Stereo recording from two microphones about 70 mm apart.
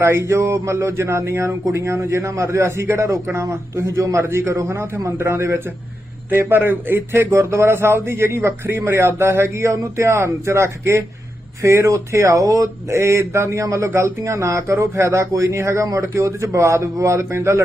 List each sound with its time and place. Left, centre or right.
0.0 s speech: right